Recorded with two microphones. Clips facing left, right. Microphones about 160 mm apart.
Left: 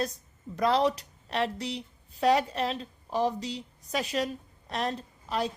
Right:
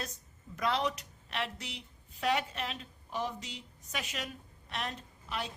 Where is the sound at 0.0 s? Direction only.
35° left (ahead or behind).